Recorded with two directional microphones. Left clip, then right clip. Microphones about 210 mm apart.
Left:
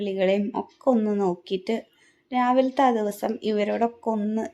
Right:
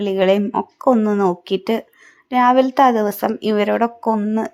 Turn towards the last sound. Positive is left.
turn(degrees=-20)  # may be behind; listen again after turning